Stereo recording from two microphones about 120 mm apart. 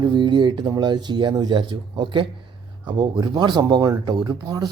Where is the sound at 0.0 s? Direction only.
40° right (ahead or behind).